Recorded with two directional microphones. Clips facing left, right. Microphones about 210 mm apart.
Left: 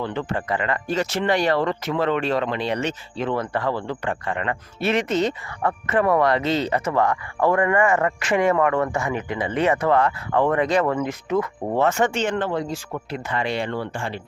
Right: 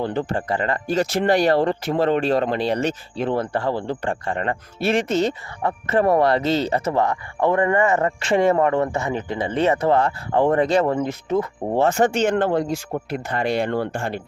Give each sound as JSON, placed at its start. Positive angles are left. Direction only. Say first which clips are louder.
{"t": 0.0, "sound": "speech", "louder": "right 3 dB", "side_deg": -35}